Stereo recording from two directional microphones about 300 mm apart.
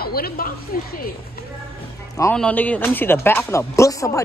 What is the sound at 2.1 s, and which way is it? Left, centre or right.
Speech, centre.